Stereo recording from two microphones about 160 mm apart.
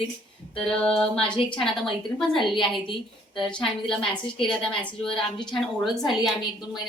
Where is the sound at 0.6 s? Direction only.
5° left (ahead or behind).